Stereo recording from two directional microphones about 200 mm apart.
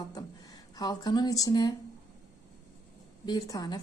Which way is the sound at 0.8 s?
20° left (ahead or behind).